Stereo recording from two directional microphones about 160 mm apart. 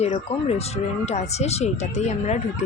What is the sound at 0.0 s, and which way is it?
A woman's voice, 40° left (ahead or behind).